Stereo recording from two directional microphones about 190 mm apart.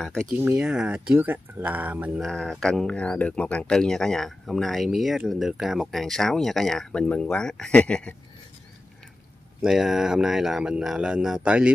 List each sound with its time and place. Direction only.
0.3 s speech: 10° right (ahead or behind)
9.6 s speech: centre (ahead or behind)